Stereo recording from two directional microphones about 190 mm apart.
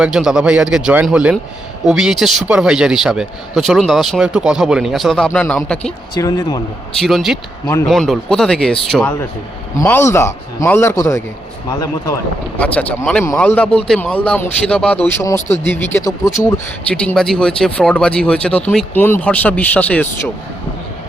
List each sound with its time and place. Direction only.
0.0 s a man's voice: 5° right (ahead or behind)
6.1 s speech: 20° left (ahead or behind)
7.0 s a man's voice: centre (ahead or behind); by 16.6 s 15° left (ahead or behind)
16.9 s a man's voice: 5° left (ahead or behind)